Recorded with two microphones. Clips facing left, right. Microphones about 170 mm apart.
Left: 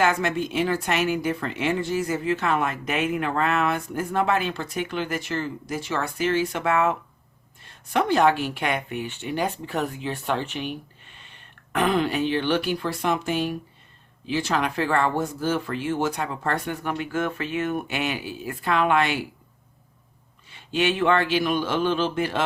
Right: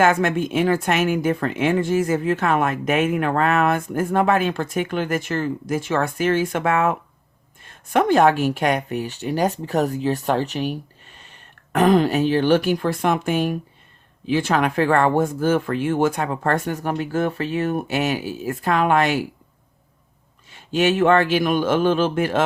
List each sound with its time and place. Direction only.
0.0 s a woman's voice: 50° right (ahead or behind)
20.5 s a woman's voice: 45° right (ahead or behind)